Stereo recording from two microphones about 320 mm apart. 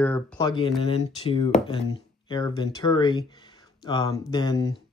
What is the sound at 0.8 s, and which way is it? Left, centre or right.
Speech, centre.